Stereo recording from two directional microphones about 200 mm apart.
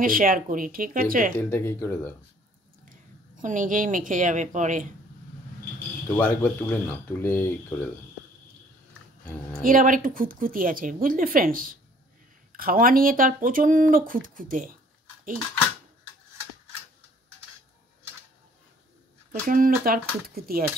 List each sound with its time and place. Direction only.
0.0 s speech: 45° right (ahead or behind)
1.5 s speech: 10° left (ahead or behind)
3.3 s a woman's voice: 40° right (ahead or behind)
6.0 s speech: 10° left (ahead or behind)
9.6 s speech: 45° right (ahead or behind)
19.4 s speech: 45° right (ahead or behind)